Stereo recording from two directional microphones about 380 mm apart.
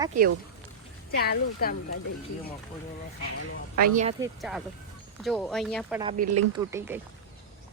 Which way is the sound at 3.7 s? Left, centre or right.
Right.